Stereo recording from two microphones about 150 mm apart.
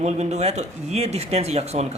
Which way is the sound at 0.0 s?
50° right (ahead or behind).